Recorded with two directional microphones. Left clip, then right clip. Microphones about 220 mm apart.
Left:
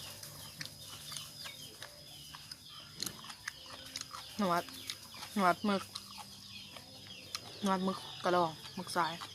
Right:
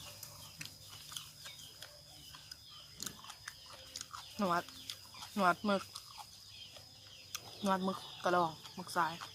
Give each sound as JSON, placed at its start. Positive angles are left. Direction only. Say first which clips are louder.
{"t": 3.9, "sound": "chicken", "louder": "left 2 dB", "side_deg": 0}
{"t": 7.3, "sound": "speech", "louder": "even", "side_deg": 0}